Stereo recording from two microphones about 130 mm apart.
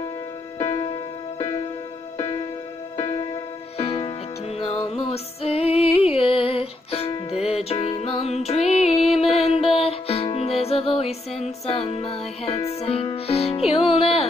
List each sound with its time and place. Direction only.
3.7 s music: 50° left (ahead or behind)